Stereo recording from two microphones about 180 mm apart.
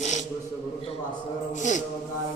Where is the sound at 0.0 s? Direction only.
40° left (ahead or behind).